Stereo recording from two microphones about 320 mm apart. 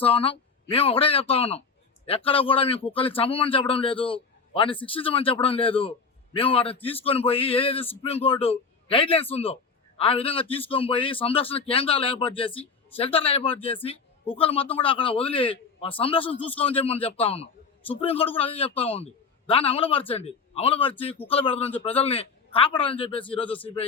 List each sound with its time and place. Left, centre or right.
0.0 s a man's voice: centre
23.5 s speech: centre